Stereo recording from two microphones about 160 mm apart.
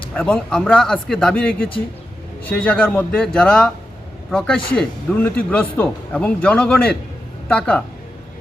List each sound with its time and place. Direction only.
0.1 s a man's voice: 5° left (ahead or behind)